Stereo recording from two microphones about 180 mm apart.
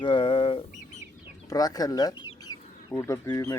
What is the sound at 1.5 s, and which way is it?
Speech, 20° left (ahead or behind).